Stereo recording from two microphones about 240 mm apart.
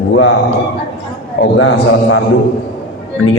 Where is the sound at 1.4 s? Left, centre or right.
Left.